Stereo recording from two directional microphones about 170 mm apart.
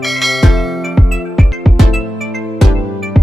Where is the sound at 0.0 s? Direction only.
Centre (ahead or behind).